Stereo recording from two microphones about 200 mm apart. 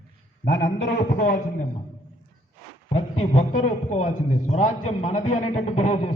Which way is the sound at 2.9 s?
35° left (ahead or behind).